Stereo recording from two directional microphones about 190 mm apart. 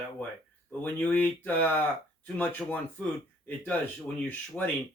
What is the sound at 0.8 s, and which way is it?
Speech, 10° left (ahead or behind).